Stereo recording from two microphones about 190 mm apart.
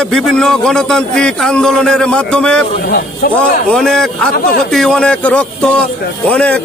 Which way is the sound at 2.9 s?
50° left (ahead or behind).